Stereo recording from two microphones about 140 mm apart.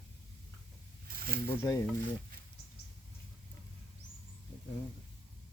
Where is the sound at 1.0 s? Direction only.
90° right.